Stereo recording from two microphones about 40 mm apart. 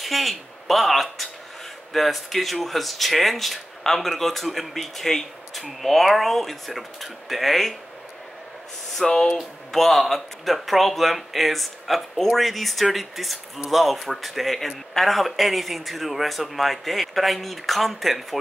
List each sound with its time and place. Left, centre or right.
0.0 s speech: centre
9.0 s speech: centre
9.7 s speech: centre